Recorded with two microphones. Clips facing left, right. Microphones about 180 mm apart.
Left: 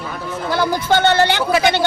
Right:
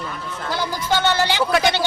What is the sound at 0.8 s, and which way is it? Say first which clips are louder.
Speech: left 4 dB; 60° left (ahead or behind).